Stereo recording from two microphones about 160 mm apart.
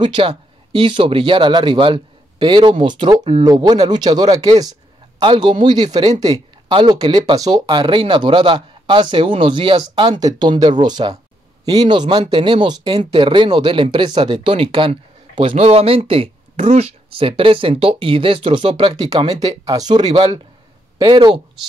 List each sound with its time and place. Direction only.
0.0 s speech: 30° right (ahead or behind)